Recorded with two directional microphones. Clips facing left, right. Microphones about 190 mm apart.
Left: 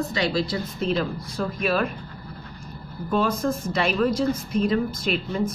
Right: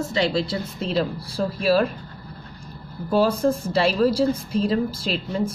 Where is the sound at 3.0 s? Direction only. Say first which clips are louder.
Right 4 dB; 30° right (ahead or behind).